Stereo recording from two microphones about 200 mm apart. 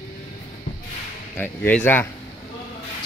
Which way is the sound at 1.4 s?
10° left (ahead or behind).